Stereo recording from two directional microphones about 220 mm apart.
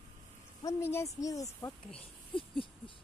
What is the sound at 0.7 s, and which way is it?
A woman's voice, 10° left (ahead or behind).